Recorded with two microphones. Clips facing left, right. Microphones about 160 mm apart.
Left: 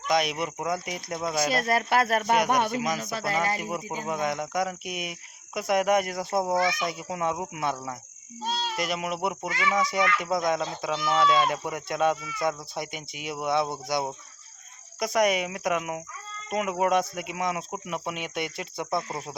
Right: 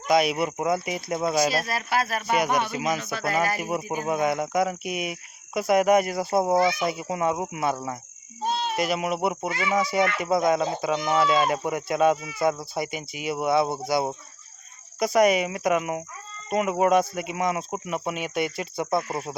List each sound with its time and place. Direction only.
0.1 s speech: 5° right (ahead or behind)
1.5 s speech: 50° left (ahead or behind)
2.7 s speech: 5° right (ahead or behind)
3.0 s speech: 35° left (ahead or behind)
3.6 s speech: 10° right (ahead or behind)
6.4 s speech: 30° right (ahead or behind)
6.7 s speech: 5° right (ahead or behind)
8.8 s speech: 5° right (ahead or behind)